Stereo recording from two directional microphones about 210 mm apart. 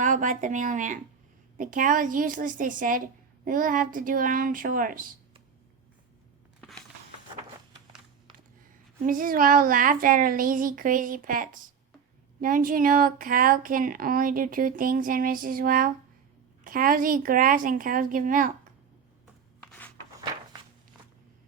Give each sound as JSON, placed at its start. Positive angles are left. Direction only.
{"t": 0.0, "sound": "speech", "side_deg": -35}
{"t": 6.6, "sound": "a sound", "side_deg": 0}
{"t": 9.0, "sound": "speech", "side_deg": -40}
{"t": 19.5, "sound": "rub", "side_deg": 5}